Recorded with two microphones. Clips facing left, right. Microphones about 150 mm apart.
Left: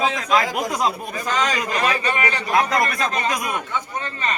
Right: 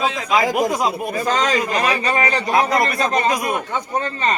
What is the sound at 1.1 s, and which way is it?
A man's voice, 35° right (ahead or behind).